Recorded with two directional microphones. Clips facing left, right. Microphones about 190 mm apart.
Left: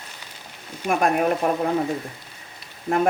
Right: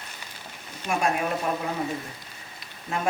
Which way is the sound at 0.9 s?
55° left (ahead or behind).